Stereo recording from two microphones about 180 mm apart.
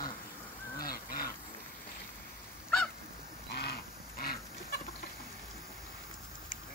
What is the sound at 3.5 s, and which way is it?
Duck, 65° left (ahead or behind).